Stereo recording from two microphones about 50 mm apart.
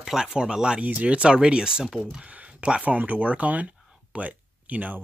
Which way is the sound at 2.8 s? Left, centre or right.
Right.